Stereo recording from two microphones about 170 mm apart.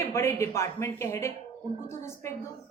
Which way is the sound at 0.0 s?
20° left (ahead or behind).